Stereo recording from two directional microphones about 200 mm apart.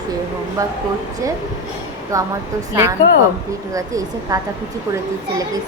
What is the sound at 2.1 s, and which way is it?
Speech, 15° right (ahead or behind).